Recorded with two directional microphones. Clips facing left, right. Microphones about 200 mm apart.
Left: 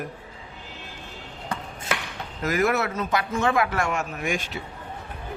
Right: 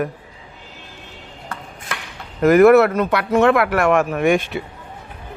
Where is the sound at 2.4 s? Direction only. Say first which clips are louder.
Right 13 dB; 60° right (ahead or behind).